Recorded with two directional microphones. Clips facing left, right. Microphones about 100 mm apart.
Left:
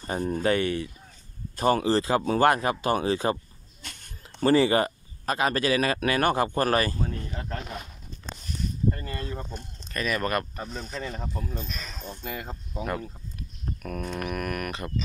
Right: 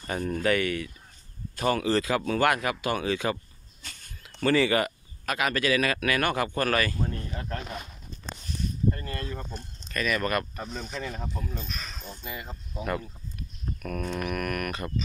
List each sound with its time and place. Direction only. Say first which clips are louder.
0.0 s speech: left 2 dB; 30° left (ahead or behind)
3.8 s pig: left 2 dB; 65° left (ahead or behind)
4.4 s speech: left 3 dB; 35° left (ahead or behind)
7.0 s speech: even; 5° left (ahead or behind)
8.9 s speech: left 1 dB; 10° left (ahead or behind)
9.9 s speech: even; 30° left (ahead or behind)
10.6 s speech: even; centre (ahead or behind)
13.8 s a sound: right 1 dB; 15° left (ahead or behind)